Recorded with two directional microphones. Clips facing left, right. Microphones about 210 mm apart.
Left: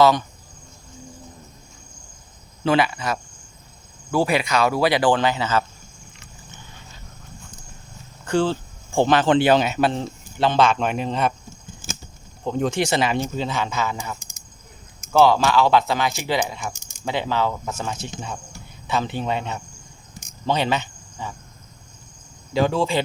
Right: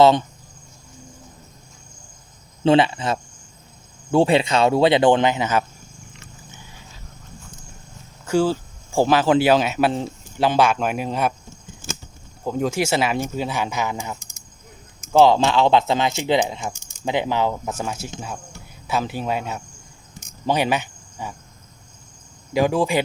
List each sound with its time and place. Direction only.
0.0 s speech: 25° right (ahead or behind)
2.6 s speech: 25° right (ahead or behind)
8.2 s speech: 5° right (ahead or behind)
12.5 s speech: 5° right (ahead or behind)
22.5 s speech: 15° right (ahead or behind)